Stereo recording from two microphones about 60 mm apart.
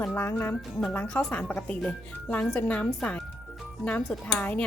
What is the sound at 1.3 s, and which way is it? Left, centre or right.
A woman's voice, centre.